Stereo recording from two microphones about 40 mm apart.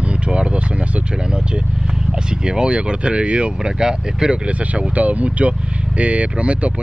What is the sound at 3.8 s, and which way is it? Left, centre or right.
Speech, centre.